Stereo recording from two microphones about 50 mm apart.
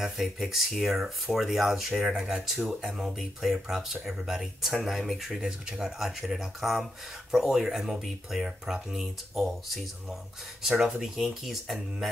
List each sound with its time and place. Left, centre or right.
0.0 s speech: centre